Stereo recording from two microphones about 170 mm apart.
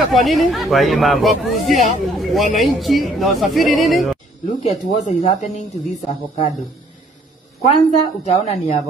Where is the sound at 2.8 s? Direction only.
Centre (ahead or behind).